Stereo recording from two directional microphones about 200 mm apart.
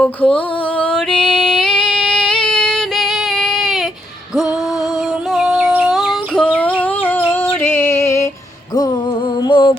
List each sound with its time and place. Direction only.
0.0 s music: 5° left (ahead or behind)
5.3 s a sound: centre (ahead or behind); by 8.3 s 15° left (ahead or behind)
9.4 s music: 25° left (ahead or behind)